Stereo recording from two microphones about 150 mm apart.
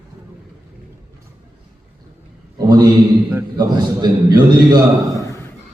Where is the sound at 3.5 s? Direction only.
30° right (ahead or behind).